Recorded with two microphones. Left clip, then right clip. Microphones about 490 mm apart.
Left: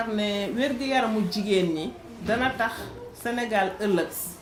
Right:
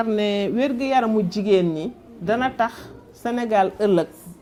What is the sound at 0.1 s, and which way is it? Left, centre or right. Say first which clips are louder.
Speech: right 6 dB; right.